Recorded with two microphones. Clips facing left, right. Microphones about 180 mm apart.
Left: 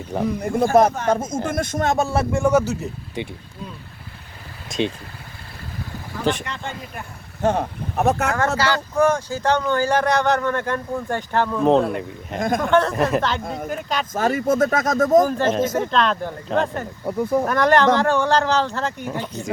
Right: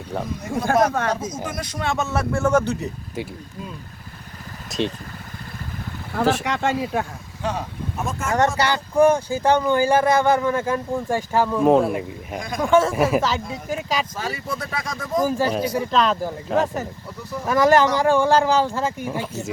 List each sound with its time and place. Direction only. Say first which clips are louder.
0.3 s speech: left 4 dB; 55° left (ahead or behind); by 2.2 s 35° left (ahead or behind)
2.3 s speech: even; 10° left (ahead or behind)
4.7 s speech: left 1 dB; centre (ahead or behind)
6.4 s speech: right 9 dB; 85° right
7.4 s speech: left 6 dB; 55° left (ahead or behind)
9.0 s speech: right 4 dB; 15° right (ahead or behind)
12.4 s speech: left 6 dB; 50° left (ahead or behind)
12.6 s speech: right 3 dB; 5° right (ahead or behind)
13.4 s speech: left 4 dB; 50° left (ahead or behind)
13.7 s speech: right 3 dB; centre (ahead or behind)
14.1 s speech: left 9 dB; 50° left (ahead or behind)
15.3 s speech: left 2 dB; 5° right (ahead or behind)
17.1 s speech: left 12 dB; 50° left (ahead or behind)
17.4 s speech: right 3 dB; 5° right (ahead or behind)